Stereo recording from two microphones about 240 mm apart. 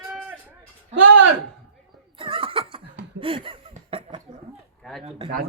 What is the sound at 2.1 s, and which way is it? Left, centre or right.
Snicker, right.